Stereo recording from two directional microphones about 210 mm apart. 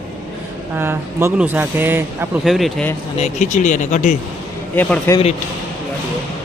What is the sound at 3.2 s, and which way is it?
Speech, 35° left (ahead or behind).